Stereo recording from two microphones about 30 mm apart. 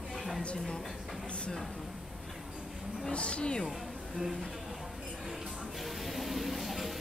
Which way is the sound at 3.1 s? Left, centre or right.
Left.